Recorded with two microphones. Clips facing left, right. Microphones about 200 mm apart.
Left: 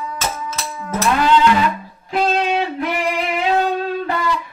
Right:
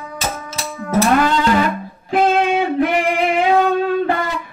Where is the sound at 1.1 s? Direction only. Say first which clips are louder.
Even; 45° right (ahead or behind).